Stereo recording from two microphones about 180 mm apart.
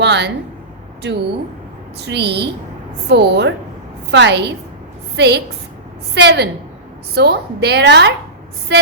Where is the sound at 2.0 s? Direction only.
65° right (ahead or behind).